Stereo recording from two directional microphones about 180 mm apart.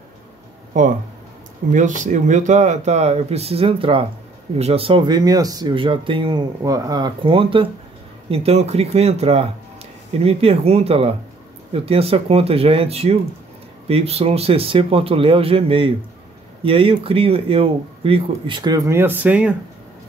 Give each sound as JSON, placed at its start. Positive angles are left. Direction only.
{"t": 0.7, "sound": "speech", "side_deg": -45}